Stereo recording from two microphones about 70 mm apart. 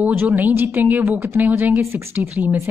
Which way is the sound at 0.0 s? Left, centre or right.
Right.